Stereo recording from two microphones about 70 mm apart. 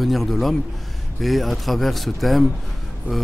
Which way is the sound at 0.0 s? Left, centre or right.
Centre.